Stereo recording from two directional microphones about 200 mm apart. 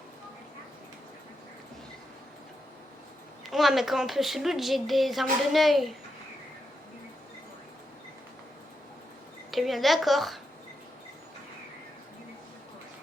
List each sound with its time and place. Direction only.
3.4 s a woman's voice: centre (ahead or behind)
9.5 s a woman's voice: centre (ahead or behind)